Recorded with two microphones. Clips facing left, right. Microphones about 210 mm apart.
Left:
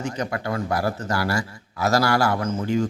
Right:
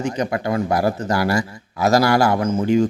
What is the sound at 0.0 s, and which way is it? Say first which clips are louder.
A man's voice: right 5 dB; 15° right (ahead or behind).